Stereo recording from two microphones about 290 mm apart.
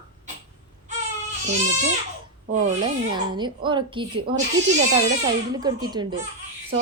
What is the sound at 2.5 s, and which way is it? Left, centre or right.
Speech, centre.